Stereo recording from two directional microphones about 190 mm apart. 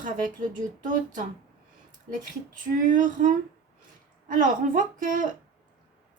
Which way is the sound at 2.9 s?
45° right (ahead or behind).